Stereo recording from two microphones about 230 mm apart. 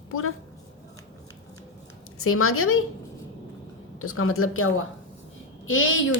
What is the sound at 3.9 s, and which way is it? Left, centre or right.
A woman's voice, left.